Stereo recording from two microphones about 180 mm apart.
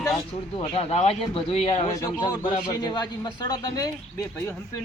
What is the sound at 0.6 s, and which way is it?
A man's voice, 35° left (ahead or behind).